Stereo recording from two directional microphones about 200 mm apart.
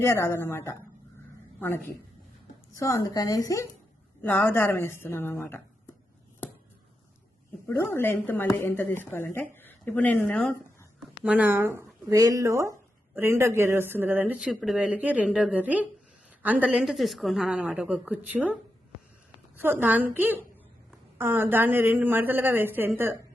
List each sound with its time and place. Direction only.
0.0 s a woman's voice: 15° left (ahead or behind)
7.7 s a woman's voice: 10° left (ahead or behind)
11.2 s a woman's voice: 5° right (ahead or behind)